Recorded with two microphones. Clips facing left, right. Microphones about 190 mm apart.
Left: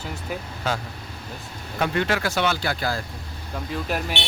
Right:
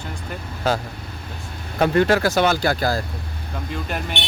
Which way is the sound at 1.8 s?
40° right (ahead or behind).